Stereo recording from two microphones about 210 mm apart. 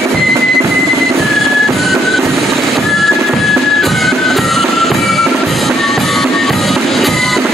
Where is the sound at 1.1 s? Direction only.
Centre (ahead or behind).